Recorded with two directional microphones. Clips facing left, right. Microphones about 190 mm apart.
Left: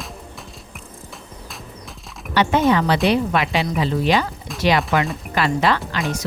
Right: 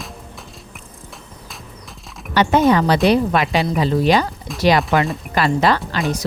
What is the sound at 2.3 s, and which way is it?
Speech, 40° right (ahead or behind).